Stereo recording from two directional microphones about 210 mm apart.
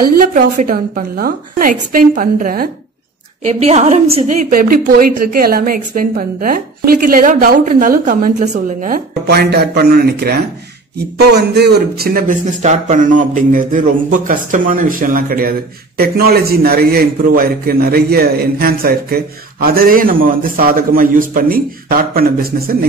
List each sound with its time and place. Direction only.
0.0 s a man's voice: 40° right (ahead or behind)